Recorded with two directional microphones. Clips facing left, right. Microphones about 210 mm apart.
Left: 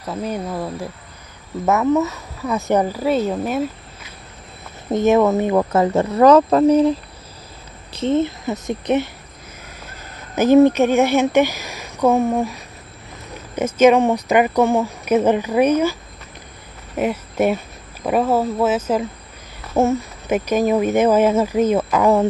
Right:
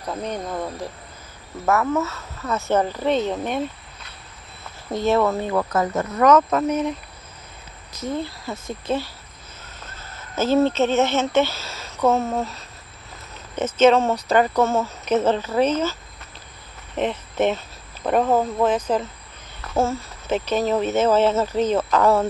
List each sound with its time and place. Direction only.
0.1 s speech: 5° left (ahead or behind)
1.7 s speech: 20° left (ahead or behind)
4.8 s speech: 20° left (ahead or behind)
19.7 s speech: 20° left (ahead or behind)